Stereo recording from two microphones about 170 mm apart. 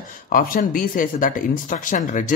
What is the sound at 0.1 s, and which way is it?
Speech, 55° left (ahead or behind).